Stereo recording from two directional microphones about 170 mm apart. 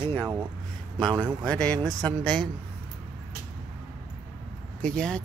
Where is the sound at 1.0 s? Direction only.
25° right (ahead or behind).